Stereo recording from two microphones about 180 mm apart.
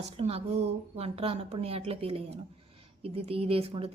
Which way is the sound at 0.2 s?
35° right (ahead or behind).